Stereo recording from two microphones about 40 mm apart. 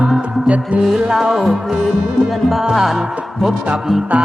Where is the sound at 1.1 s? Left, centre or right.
Centre.